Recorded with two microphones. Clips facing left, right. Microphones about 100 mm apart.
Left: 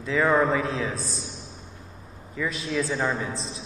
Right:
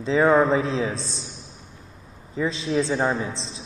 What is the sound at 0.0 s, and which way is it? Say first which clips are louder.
A man's voice: right 4 dB; 25° right (ahead or behind).